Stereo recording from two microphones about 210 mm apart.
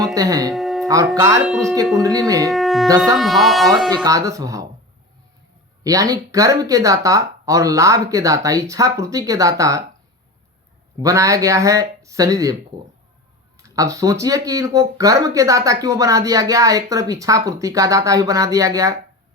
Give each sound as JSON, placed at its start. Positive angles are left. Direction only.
{"t": 0.0, "sound": "speech", "side_deg": -15}
{"t": 0.5, "sound": "music", "side_deg": 0}
{"t": 0.9, "sound": "speech", "side_deg": -15}
{"t": 1.5, "sound": "speech", "side_deg": 0}
{"t": 1.7, "sound": "speech", "side_deg": -15}
{"t": 2.5, "sound": "wind instrument", "side_deg": 0}
{"t": 3.2, "sound": "speech", "side_deg": 0}
{"t": 4.0, "sound": "speech", "side_deg": -15}
{"t": 5.8, "sound": "speech", "side_deg": -15}
{"t": 11.0, "sound": "speech", "side_deg": -15}
{"t": 13.6, "sound": "speech", "side_deg": -15}